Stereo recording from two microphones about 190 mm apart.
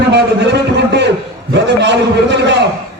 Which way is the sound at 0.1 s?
65° right (ahead or behind).